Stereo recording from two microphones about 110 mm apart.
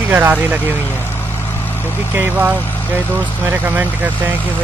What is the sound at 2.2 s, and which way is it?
Speech, 15° right (ahead or behind).